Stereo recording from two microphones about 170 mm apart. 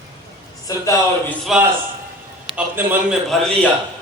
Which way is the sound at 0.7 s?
20° left (ahead or behind).